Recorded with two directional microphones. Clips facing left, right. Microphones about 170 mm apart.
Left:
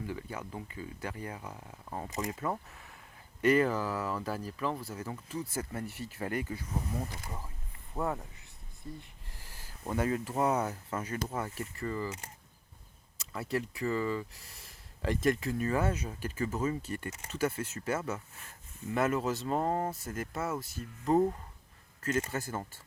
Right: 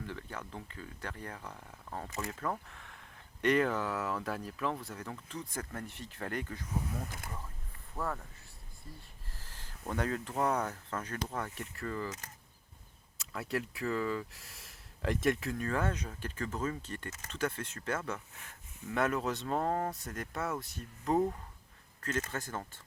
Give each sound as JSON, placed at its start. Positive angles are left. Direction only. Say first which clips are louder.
{"t": 0.0, "sound": "speech", "louder": "left 4 dB", "side_deg": 10}
{"t": 7.9, "sound": "speech", "louder": "left 4 dB", "side_deg": 20}